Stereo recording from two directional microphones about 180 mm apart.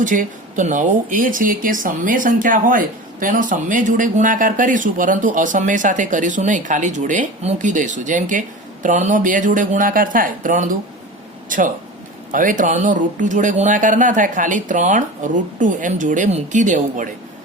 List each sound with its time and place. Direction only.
0.0 s speech: 45° right (ahead or behind)